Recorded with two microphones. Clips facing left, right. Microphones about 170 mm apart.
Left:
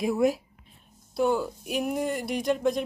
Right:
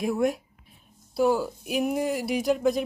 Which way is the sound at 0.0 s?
Centre (ahead or behind).